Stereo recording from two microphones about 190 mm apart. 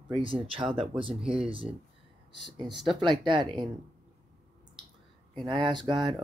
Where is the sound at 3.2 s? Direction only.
25° right (ahead or behind).